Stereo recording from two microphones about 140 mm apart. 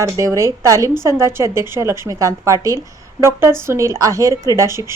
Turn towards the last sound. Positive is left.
turn(degrees=-20)  # may be behind; listen again after turning